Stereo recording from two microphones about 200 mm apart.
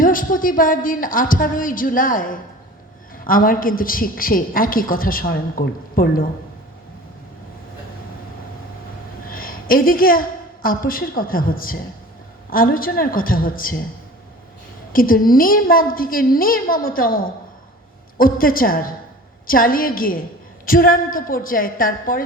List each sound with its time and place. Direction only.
0.0 s a woman's voice: 45° left (ahead or behind)
9.3 s a woman's voice: 45° left (ahead or behind)
14.9 s a woman's voice: 45° left (ahead or behind)